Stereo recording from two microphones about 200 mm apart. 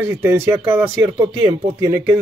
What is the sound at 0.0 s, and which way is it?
Speech, 10° right (ahead or behind).